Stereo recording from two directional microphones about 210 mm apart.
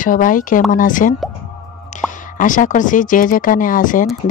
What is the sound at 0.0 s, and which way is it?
Speech, 40° left (ahead or behind).